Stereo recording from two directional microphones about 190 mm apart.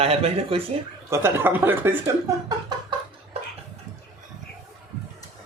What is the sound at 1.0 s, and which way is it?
Speech, 15° right (ahead or behind).